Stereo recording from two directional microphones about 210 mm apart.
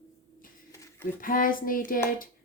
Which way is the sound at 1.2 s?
40° left (ahead or behind).